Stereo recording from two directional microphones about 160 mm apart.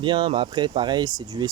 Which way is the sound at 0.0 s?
30° right (ahead or behind).